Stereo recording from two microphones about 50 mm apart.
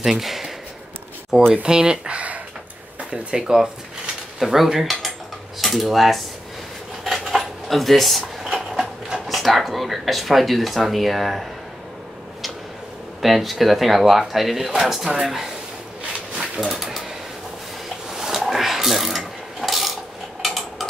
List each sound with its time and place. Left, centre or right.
0.0 s speech: centre
1.5 s speech: centre
7.1 s dishes: centre
13.2 s speech: centre
16.6 s speech: centre
18.1 s mechanisms: centre
20.4 s a sound: centre